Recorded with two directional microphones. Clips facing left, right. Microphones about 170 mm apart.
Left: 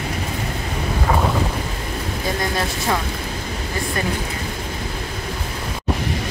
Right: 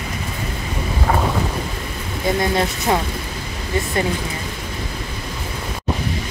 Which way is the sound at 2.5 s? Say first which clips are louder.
Right 3 dB; 20° right (ahead or behind).